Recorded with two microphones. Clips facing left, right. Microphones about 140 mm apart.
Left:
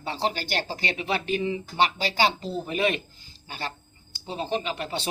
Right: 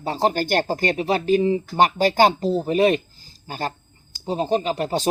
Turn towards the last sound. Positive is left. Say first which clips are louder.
# right 8 dB
turn(degrees=-40)  # may be behind; listen again after turning